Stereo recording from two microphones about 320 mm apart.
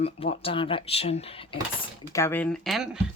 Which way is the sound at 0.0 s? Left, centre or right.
Centre.